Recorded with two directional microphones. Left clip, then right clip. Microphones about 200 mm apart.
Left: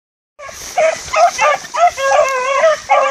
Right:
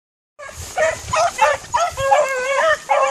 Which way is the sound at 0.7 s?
15° right (ahead or behind).